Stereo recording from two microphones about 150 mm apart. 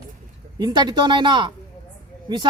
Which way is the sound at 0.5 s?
30° right (ahead or behind).